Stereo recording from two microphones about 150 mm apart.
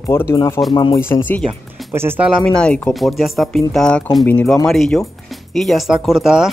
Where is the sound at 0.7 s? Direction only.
30° left (ahead or behind).